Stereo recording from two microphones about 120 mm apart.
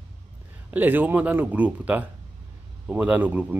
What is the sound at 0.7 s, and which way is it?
Speech, 15° right (ahead or behind).